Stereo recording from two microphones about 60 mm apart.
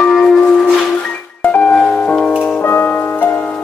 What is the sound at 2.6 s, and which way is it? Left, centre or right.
Music, left.